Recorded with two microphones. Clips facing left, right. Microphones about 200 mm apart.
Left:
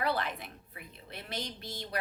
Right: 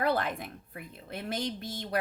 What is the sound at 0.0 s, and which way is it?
Speech, 50° right (ahead or behind).